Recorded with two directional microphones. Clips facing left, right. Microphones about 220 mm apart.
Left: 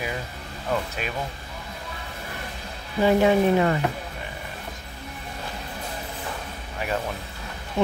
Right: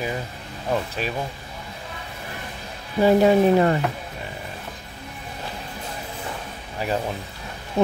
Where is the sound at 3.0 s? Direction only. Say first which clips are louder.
Right 3 dB; 35° right (ahead or behind).